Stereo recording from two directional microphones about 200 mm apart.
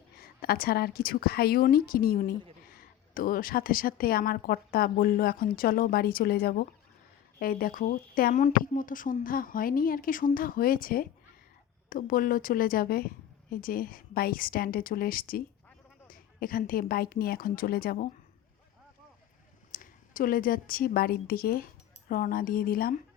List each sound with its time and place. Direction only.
0.2 s speech: 50° left (ahead or behind)
19.7 s a woman's voice: 40° left (ahead or behind)